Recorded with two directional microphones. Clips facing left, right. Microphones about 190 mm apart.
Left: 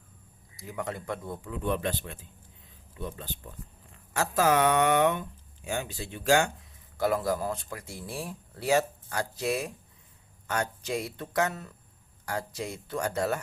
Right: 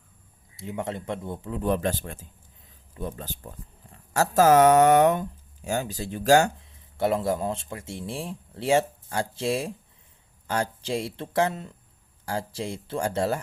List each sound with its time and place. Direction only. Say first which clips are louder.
0.5 s speech: right 4 dB; 25° right (ahead or behind); by 6.5 s 40° right (ahead or behind)
6.9 s speech: right 3 dB; 25° right (ahead or behind)